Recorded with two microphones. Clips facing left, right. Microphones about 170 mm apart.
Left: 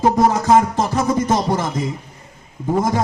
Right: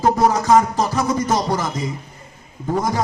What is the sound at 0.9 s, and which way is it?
Music, 25° left (ahead or behind).